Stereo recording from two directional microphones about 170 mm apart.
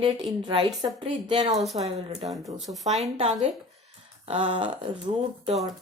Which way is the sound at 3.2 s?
35° right (ahead or behind).